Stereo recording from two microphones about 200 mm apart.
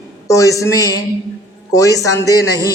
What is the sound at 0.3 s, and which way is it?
A man's voice, 15° left (ahead or behind).